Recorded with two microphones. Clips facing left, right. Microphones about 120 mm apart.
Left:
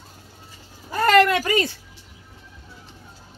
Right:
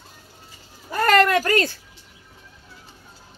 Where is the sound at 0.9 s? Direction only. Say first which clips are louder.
Left 1 dB; 20° left (ahead or behind).